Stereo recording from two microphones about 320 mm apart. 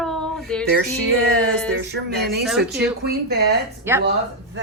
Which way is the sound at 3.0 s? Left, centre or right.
Right.